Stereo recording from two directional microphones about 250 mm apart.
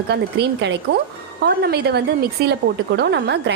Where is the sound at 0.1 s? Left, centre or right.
Right.